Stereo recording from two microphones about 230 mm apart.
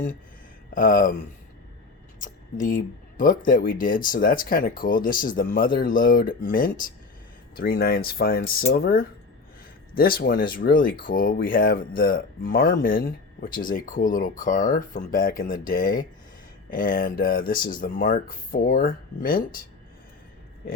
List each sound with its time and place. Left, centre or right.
0.7 s speech: left